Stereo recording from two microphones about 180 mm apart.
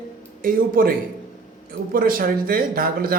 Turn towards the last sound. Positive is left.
turn(degrees=-55)  # may be behind; listen again after turning